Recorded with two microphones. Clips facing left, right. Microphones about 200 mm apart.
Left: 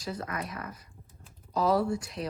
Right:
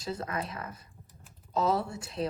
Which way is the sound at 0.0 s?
25° right (ahead or behind).